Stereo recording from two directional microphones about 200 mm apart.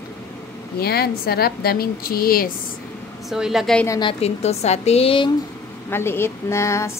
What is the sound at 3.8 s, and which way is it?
A woman's voice, 20° left (ahead or behind).